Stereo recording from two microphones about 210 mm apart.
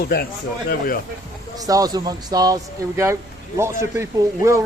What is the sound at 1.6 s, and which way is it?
Speech, 15° right (ahead or behind).